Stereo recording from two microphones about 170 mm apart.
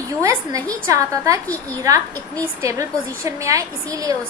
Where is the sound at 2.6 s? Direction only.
20° right (ahead or behind).